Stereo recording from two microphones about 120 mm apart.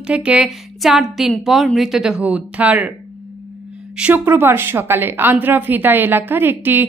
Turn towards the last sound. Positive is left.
turn(degrees=-15)  # may be behind; listen again after turning